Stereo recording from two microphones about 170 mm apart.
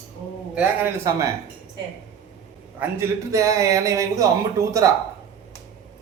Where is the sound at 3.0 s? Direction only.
20° right (ahead or behind).